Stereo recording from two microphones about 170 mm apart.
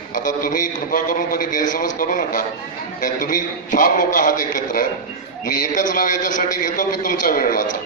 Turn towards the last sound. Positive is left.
turn(degrees=55)  # may be behind; listen again after turning